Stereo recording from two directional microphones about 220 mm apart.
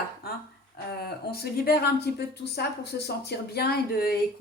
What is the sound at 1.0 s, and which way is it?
Speech, 45° left (ahead or behind).